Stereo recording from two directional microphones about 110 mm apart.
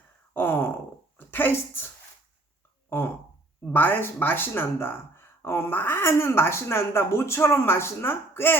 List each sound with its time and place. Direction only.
0.3 s a sound: 20° left (ahead or behind)
1.2 s speech: 20° left (ahead or behind)
3.7 s speech: 15° left (ahead or behind)